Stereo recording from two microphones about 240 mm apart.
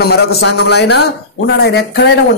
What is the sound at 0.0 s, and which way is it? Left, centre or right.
A man's voice, left.